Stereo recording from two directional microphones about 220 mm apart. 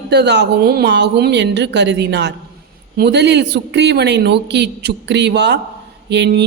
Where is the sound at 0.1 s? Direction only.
50° right (ahead or behind).